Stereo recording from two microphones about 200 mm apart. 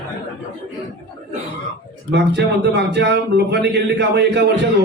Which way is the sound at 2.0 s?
55° right (ahead or behind).